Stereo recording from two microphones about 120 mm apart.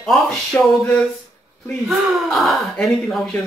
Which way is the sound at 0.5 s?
20° left (ahead or behind).